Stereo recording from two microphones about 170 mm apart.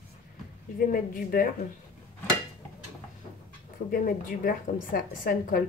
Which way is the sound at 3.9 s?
55° left (ahead or behind).